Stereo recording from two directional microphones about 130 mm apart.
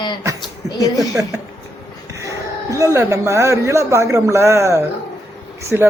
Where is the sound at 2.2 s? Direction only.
25° right (ahead or behind).